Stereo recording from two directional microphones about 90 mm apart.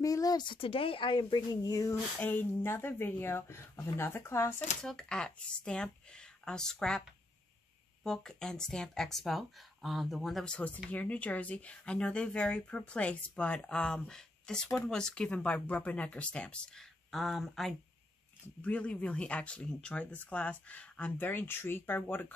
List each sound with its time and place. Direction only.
0.0 s speech: 40° left (ahead or behind)
0.5 s speech: 85° left; by 2.0 s 40° left (ahead or behind)
2.1 s speech: 20° left (ahead or behind)
4.8 s speech: 10° left (ahead or behind)
8.0 s speech: 5° left (ahead or behind)
18.6 s speech: 15° left (ahead or behind)